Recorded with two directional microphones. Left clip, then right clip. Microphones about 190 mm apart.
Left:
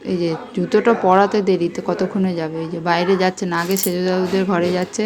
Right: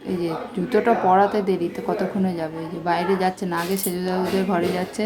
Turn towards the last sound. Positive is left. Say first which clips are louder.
# left 4 dB
turn(degrees=15)  # may be behind; listen again after turning